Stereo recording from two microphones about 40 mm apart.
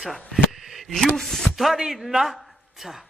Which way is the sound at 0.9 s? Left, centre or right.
Centre.